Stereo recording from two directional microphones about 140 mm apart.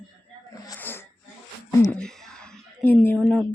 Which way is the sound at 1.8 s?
5° left (ahead or behind).